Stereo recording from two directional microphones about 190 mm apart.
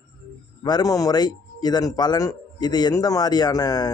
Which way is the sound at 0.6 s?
20° left (ahead or behind).